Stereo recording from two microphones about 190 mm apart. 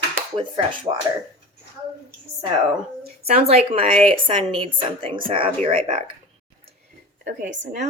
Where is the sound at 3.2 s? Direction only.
35° right (ahead or behind).